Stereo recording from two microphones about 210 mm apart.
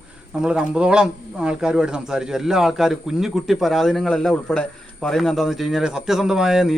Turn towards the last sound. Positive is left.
turn(degrees=0)  # may be behind; listen again after turning